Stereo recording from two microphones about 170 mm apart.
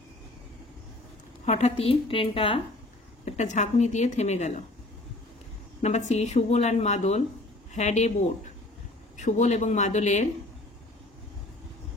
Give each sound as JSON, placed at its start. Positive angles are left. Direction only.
{"t": 1.4, "sound": "speech", "side_deg": 40}
{"t": 3.3, "sound": "speech", "side_deg": 45}
{"t": 5.8, "sound": "speech", "side_deg": 40}